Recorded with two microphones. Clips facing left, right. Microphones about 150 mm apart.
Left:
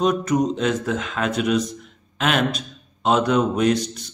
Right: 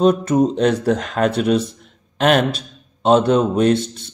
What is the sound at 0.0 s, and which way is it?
A man's voice, 30° right (ahead or behind).